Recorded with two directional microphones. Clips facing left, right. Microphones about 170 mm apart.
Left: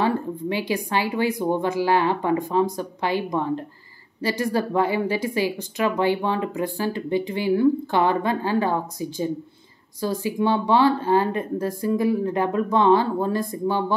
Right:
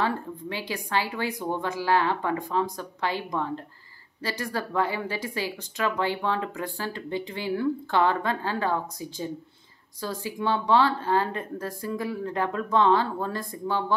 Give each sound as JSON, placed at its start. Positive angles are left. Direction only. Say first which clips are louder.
{"t": 0.0, "sound": "a woman's voice", "louder": "left 5 dB", "side_deg": 15}